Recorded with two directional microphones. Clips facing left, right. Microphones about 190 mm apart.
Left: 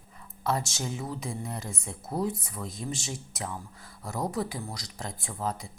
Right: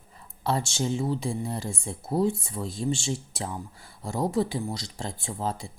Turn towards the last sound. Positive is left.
turn(degrees=-30)  # may be behind; listen again after turning